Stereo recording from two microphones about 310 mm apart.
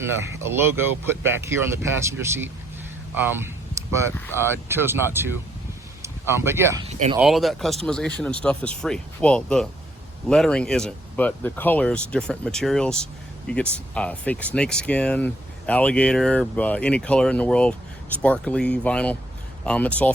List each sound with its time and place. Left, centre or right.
0.0 s speech: centre
6.8 s speech: centre
7.2 s speech: centre